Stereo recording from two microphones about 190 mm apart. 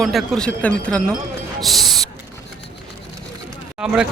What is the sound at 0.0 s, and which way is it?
Speech, centre (ahead or behind).